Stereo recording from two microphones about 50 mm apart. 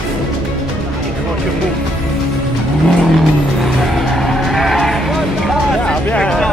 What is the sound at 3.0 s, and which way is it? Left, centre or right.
Livestock, centre.